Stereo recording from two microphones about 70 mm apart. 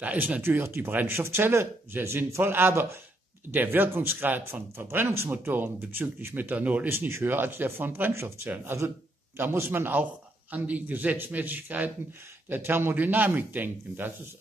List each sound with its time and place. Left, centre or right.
0.0 s speech: right
0.4 s speech: right
6.9 s speech: right
9.4 s speech: right